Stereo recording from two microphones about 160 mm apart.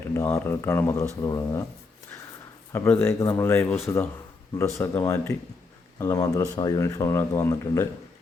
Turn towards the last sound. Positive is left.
turn(degrees=15)  # may be behind; listen again after turning